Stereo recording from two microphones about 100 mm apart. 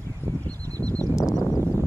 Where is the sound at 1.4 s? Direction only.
25° left (ahead or behind).